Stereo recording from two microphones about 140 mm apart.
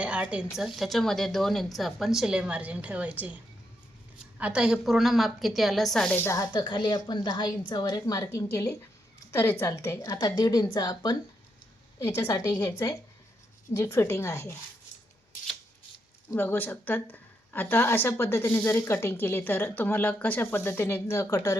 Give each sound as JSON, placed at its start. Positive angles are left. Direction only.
{"t": 0.0, "sound": "a sound", "side_deg": -10}
{"t": 0.5, "sound": "a woman's voice", "side_deg": -5}
{"t": 4.4, "sound": "a woman's voice", "side_deg": -10}
{"t": 6.1, "sound": "a woman's voice", "side_deg": 20}
{"t": 16.3, "sound": "a woman's voice", "side_deg": 15}